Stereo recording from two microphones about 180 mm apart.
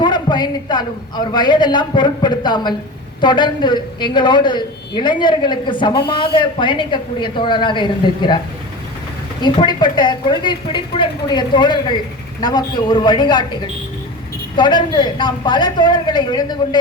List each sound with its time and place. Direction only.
0.0 s a man's voice: 25° left (ahead or behind)
9.4 s a man's voice: 25° left (ahead or behind)